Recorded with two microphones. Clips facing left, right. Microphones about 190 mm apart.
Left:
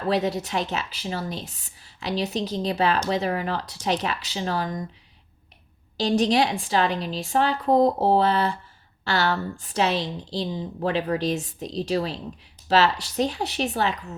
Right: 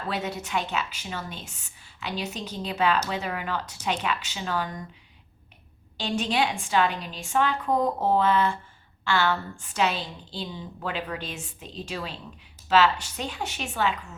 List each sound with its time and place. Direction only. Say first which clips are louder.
0.1 s speech: left 6 dB; 35° left (ahead or behind)
6.0 s speech: left 6 dB; 35° left (ahead or behind)